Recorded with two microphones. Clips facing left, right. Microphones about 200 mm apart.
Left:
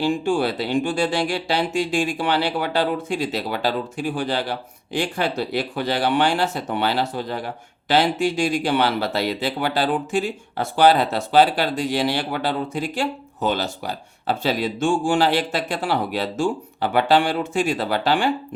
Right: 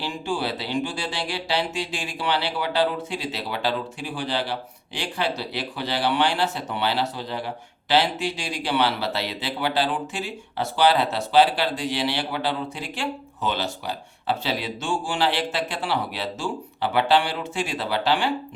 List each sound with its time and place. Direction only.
0.0 s speech: 50° left (ahead or behind)